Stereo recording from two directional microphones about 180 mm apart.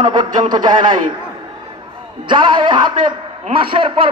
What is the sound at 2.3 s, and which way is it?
A man's voice, 25° right (ahead or behind).